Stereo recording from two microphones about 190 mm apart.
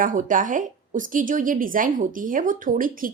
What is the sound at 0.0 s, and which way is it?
A woman's voice, 45° right (ahead or behind).